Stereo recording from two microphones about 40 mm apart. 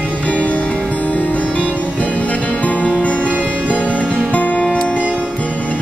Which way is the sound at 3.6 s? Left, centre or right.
Left.